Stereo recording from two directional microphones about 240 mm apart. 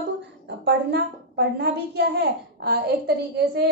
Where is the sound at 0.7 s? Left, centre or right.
Right.